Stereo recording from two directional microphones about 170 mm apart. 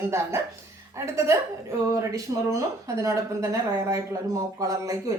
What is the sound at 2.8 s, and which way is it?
A woman's voice, 20° right (ahead or behind).